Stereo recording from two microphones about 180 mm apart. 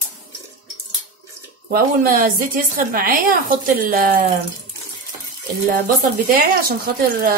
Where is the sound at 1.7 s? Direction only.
55° right (ahead or behind).